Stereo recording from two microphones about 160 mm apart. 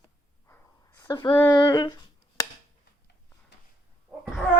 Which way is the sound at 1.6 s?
25° left (ahead or behind).